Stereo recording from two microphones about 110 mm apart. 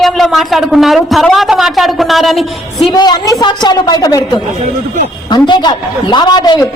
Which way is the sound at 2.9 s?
40° left (ahead or behind).